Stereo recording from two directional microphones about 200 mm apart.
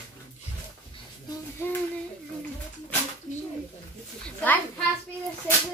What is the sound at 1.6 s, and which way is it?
Child singing, 10° left (ahead or behind).